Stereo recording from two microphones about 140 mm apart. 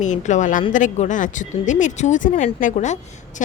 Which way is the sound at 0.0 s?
60° left (ahead or behind).